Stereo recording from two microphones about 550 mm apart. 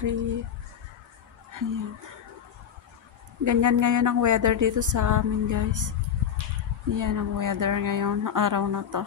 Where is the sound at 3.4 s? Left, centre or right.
Right.